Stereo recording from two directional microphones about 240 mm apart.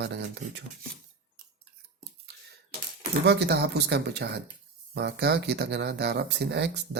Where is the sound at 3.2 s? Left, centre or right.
Right.